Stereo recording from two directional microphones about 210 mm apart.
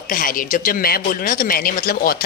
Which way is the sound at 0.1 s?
40° left (ahead or behind).